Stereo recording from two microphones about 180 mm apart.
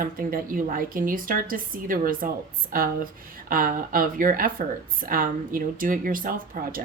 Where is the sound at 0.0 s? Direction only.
50° right (ahead or behind).